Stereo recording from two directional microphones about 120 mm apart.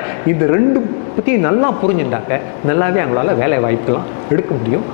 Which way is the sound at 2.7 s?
20° left (ahead or behind).